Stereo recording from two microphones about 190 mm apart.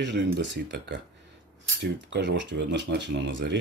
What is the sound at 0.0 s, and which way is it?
Speech, 70° right (ahead or behind).